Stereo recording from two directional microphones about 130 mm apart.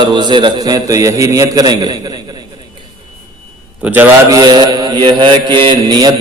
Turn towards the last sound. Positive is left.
turn(degrees=-30)  # may be behind; listen again after turning